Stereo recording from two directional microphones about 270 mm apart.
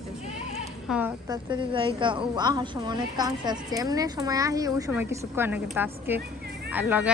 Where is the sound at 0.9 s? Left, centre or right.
Centre.